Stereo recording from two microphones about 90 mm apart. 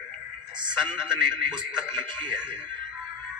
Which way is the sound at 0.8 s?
5° right (ahead or behind).